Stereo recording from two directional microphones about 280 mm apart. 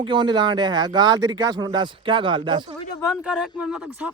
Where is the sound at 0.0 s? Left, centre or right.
Centre.